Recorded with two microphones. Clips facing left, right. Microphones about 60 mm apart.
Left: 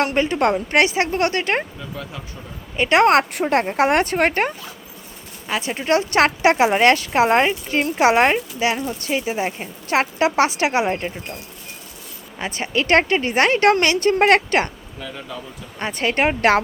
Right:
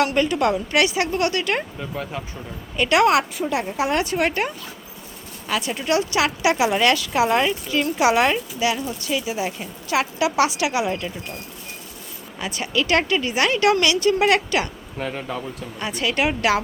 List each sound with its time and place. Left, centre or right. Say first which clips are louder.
0.0 s speech: left 1 dB; left
2.0 s speech: right 3 dB; right
2.7 s speech: left 2 dB; left
3.0 s speech: left 3 dB; left
3.3 s speech: left 5 dB; left
5.5 s speech: left 2 dB; left
6.1 s speech: left 4 dB; left
12.4 s speech: left 1 dB; left
14.9 s speech: right 8 dB; right
15.8 s speech: left 3 dB; left